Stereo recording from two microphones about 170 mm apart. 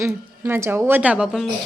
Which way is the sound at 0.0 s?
10° right (ahead or behind).